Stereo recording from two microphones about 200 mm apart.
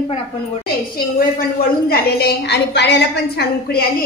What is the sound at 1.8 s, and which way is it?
A woman's voice, 55° left (ahead or behind).